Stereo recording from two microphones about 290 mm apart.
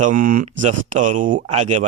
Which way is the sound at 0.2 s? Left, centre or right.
Right.